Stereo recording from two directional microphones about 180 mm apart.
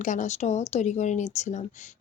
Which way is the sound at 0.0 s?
45° left (ahead or behind).